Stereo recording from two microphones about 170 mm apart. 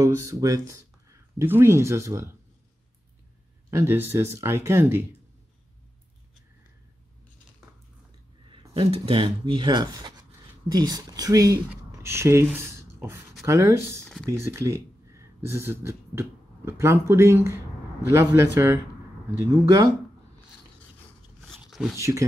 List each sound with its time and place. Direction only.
0.0 s speech: 15° right (ahead or behind)
3.7 s speech: 15° right (ahead or behind)
8.5 s speech: 30° right (ahead or behind)
21.5 s a sound: centre (ahead or behind)
21.9 s speech: 15° right (ahead or behind)